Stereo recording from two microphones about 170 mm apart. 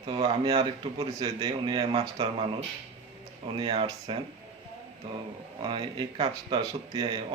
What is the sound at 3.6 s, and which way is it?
Speech, 30° right (ahead or behind).